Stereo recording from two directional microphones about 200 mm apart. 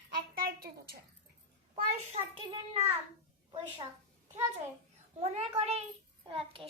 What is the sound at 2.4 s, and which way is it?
Speech, 25° right (ahead or behind).